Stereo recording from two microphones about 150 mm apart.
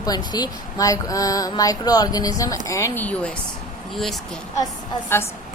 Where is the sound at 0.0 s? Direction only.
25° left (ahead or behind); by 3.3 s 10° left (ahead or behind).